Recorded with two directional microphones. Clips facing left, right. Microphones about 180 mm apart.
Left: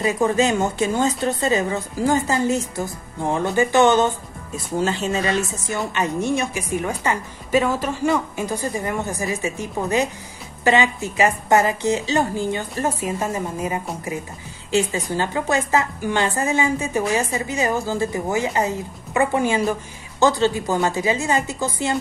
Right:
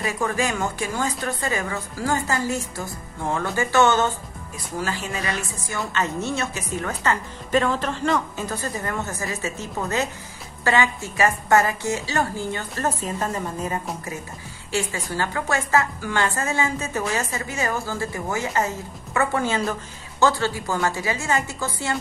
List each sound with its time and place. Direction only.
0.0 s a woman's voice: 20° left (ahead or behind)